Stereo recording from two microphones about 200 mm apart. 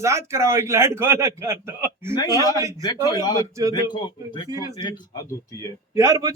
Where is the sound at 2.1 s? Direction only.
20° left (ahead or behind).